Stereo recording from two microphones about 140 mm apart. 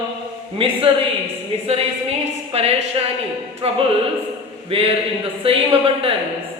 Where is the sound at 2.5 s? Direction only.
45° right (ahead or behind).